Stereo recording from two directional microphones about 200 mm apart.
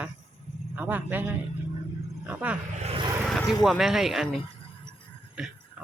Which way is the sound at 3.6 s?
Centre (ahead or behind).